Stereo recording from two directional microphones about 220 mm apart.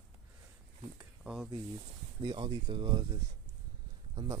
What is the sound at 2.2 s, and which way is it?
Speech, 20° right (ahead or behind).